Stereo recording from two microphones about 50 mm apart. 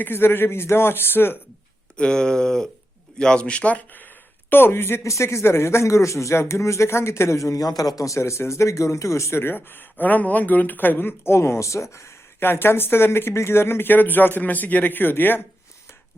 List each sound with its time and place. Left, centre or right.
0.0 s speech: left
2.0 s speech: centre
4.0 s a sound: left
5.0 s a man's voice: left
9.4 s speech: left
12.4 s speech: left